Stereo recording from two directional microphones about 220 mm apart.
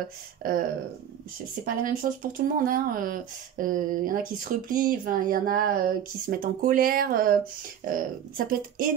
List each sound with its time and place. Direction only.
0.4 s speech: 40° right (ahead or behind)